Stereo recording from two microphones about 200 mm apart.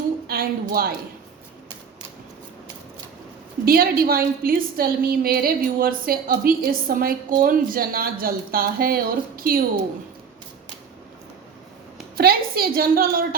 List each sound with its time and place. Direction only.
0.3 s a woman's voice: 50° right (ahead or behind)
3.7 s a woman's voice: 50° right (ahead or behind)
12.1 s a woman's voice: 50° right (ahead or behind)